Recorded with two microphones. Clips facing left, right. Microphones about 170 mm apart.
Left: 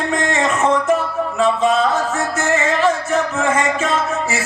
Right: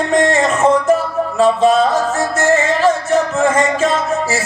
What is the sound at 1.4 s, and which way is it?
Music, 35° right (ahead or behind).